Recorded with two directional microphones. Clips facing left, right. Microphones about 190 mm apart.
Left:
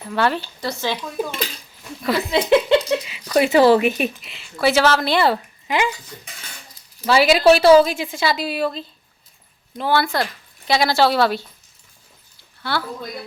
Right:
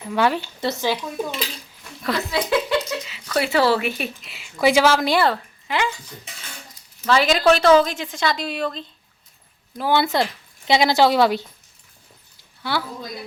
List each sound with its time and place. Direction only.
0.1 s speech: 10° right (ahead or behind)
2.0 s speech: 5° left (ahead or behind)
2.3 s speech: 25° left (ahead or behind)
4.4 s speech: 15° right (ahead or behind)
5.2 s a woman's voice: 15° left (ahead or behind)
7.0 s a woman's voice: 10° left (ahead or behind)
9.9 s speech: 20° right (ahead or behind)
12.7 s speech: 15° right (ahead or behind)